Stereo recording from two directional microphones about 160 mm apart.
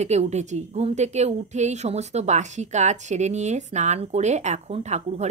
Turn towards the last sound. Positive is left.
turn(degrees=-45)  # may be behind; listen again after turning